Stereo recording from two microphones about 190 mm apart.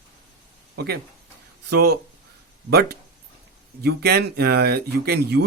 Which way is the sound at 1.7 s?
55° right (ahead or behind).